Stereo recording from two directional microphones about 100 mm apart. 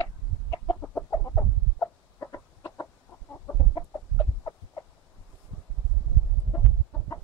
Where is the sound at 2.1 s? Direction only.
30° left (ahead or behind).